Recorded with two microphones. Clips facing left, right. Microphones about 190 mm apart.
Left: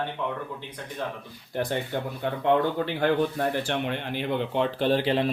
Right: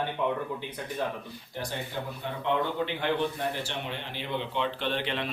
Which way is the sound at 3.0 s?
45° left (ahead or behind).